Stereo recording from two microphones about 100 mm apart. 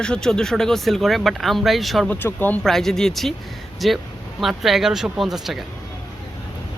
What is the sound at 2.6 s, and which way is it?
Speech, 5° left (ahead or behind).